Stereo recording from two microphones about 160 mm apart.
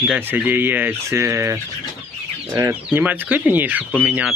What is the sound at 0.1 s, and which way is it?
Speech, 10° right (ahead or behind).